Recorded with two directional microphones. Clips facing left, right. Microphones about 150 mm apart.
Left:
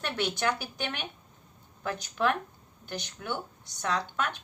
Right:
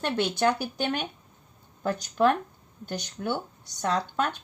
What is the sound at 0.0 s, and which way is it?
Speech, 30° right (ahead or behind).